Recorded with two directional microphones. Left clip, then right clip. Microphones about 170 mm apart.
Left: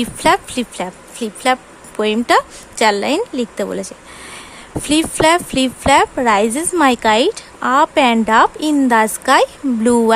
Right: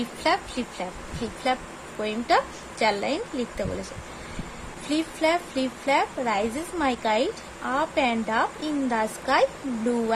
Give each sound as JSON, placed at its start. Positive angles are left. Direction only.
{"t": 0.0, "sound": "speech", "side_deg": 45}
{"t": 4.9, "sound": "speech", "side_deg": 45}